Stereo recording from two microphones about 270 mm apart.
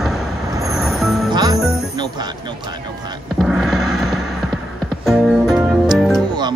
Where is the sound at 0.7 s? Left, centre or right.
Centre.